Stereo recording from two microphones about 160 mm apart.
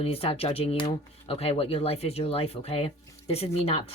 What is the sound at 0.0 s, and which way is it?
Speech, 40° left (ahead or behind).